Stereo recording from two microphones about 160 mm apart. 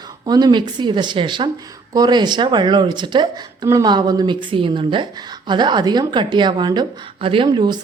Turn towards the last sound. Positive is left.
turn(degrees=-25)  # may be behind; listen again after turning